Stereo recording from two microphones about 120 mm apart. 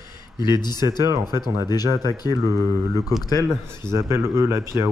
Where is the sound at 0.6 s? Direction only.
35° left (ahead or behind).